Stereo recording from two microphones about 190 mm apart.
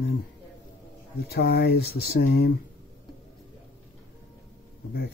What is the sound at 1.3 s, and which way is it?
Speech, 60° left (ahead or behind).